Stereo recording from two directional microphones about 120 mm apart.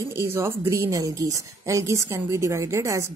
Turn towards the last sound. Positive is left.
turn(degrees=-25)  # may be behind; listen again after turning